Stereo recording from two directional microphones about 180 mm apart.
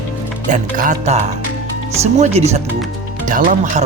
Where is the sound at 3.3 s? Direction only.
45° right (ahead or behind).